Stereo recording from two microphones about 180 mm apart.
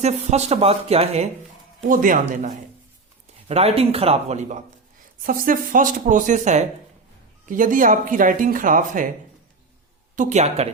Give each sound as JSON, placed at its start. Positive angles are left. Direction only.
{"t": 0.0, "sound": "speech", "side_deg": -35}
{"t": 1.9, "sound": "speech", "side_deg": -50}
{"t": 3.5, "sound": "speech", "side_deg": -35}
{"t": 5.2, "sound": "speech", "side_deg": -50}
{"t": 10.2, "sound": "speech", "side_deg": -40}